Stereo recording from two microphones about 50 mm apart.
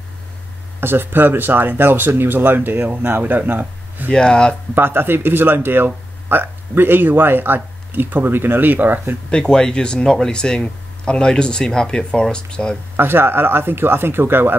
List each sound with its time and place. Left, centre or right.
0.7 s speech: right
4.1 s speech: centre
4.7 s speech: right
9.3 s speech: centre
12.9 s speech: right